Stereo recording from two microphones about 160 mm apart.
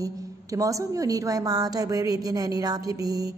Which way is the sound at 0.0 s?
20° right (ahead or behind).